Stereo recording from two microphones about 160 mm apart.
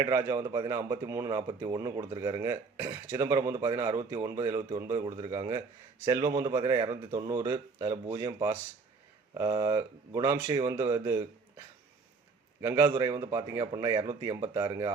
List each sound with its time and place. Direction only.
0.0 s speech: 20° right (ahead or behind)
12.6 s speech: 20° right (ahead or behind)